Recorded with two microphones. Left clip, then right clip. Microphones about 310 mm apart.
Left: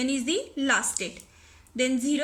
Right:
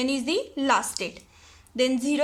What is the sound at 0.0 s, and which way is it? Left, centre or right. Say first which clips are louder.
A woman's voice: right 2 dB; centre.